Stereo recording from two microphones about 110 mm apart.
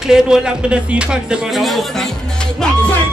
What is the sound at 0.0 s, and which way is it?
Speech, 5° right (ahead or behind).